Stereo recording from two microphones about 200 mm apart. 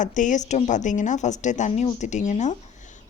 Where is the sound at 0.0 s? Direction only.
40° left (ahead or behind).